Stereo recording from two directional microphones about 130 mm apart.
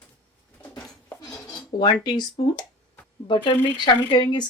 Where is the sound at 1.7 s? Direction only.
35° left (ahead or behind).